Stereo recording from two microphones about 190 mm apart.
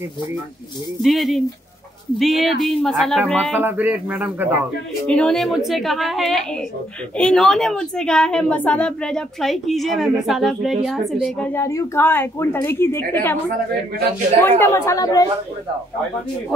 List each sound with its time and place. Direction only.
1.0 s a woman's voice: centre (ahead or behind)
3.5 s speech: 10° right (ahead or behind)
5.0 s a woman's voice: 5° left (ahead or behind)
14.6 s a woman's voice: 15° left (ahead or behind)